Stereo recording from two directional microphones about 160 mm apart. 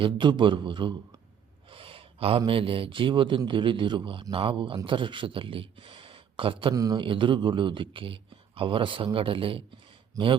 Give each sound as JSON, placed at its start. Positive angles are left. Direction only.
{"t": 0.0, "sound": "a man's voice", "side_deg": -30}
{"t": 1.7, "sound": "gasp", "side_deg": -35}
{"t": 2.5, "sound": "a man's voice", "side_deg": -35}